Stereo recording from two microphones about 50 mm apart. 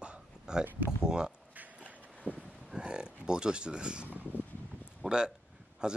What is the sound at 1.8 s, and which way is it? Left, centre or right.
Vehicle, right.